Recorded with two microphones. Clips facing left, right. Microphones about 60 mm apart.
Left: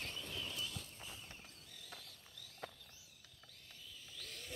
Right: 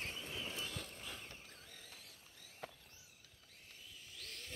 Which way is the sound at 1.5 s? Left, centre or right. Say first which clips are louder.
Right 2 dB; right.